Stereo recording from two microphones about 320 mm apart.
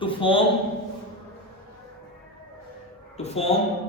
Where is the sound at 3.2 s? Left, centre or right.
Centre.